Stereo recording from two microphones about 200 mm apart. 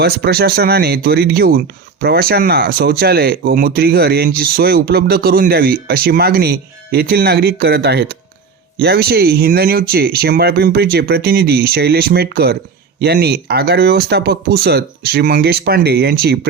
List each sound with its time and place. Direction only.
0.0 s speech: 50° right (ahead or behind)